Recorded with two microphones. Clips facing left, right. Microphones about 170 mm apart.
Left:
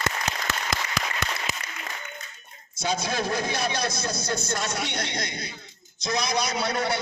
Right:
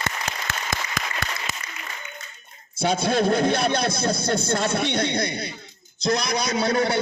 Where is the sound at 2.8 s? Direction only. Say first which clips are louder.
Right 7 dB; 55° right (ahead or behind).